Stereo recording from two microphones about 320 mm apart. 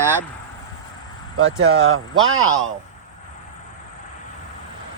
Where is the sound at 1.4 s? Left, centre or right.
Right.